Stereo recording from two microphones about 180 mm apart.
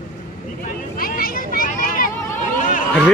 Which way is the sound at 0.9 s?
55° left (ahead or behind).